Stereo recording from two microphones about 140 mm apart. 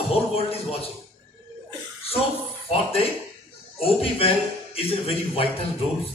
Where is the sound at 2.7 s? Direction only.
45° left (ahead or behind).